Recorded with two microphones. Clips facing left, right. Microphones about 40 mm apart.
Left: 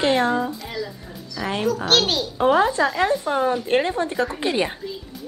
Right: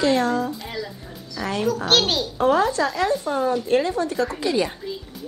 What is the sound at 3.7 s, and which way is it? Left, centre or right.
Speech, left.